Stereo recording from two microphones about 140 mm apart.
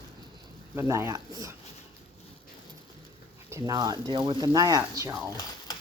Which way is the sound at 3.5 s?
25° right (ahead or behind).